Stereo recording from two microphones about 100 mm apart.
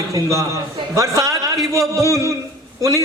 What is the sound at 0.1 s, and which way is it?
A man's voice, 30° right (ahead or behind).